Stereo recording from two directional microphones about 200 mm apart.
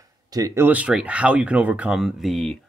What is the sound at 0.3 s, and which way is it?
Speech, 15° right (ahead or behind).